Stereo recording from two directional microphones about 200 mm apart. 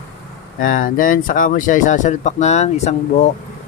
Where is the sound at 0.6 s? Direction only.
45° left (ahead or behind).